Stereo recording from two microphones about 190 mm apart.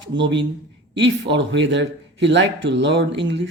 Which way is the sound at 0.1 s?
70° right (ahead or behind).